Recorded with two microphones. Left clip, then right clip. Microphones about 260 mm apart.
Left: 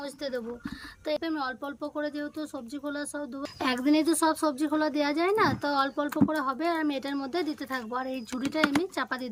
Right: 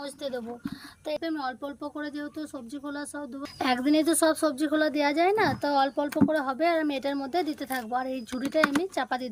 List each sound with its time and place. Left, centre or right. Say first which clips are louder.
0.0 s speech: even; centre